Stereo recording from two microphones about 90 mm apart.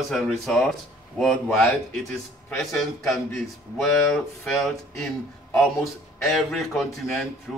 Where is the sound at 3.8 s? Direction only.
5° left (ahead or behind).